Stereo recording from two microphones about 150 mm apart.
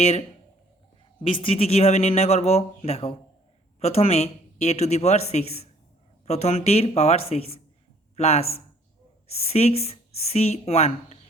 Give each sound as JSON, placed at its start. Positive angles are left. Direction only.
{"t": 0.0, "sound": "speech", "side_deg": 45}